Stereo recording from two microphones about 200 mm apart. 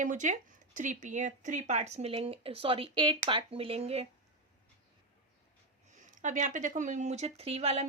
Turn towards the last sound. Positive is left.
turn(degrees=-30)  # may be behind; listen again after turning